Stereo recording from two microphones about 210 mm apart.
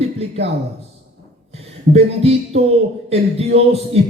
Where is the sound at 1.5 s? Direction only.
30° right (ahead or behind).